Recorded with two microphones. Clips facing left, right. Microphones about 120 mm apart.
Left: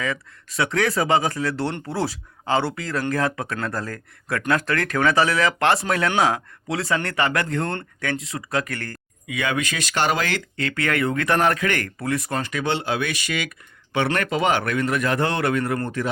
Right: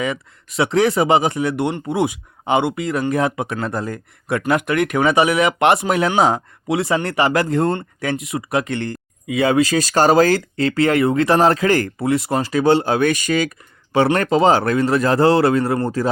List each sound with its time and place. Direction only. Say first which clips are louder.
0.0 s speech: right 4 dB; 25° right (ahead or behind)